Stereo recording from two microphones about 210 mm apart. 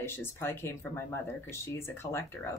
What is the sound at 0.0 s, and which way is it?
Speech, 10° left (ahead or behind).